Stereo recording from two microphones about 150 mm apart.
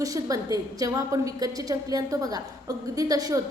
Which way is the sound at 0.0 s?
20° right (ahead or behind).